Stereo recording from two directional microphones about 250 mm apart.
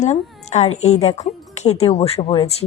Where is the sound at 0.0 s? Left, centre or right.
Left.